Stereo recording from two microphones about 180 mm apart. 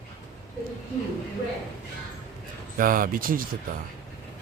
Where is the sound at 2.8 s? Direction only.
50° right (ahead or behind).